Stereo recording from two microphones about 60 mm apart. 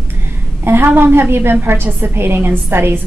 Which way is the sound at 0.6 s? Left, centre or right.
Right.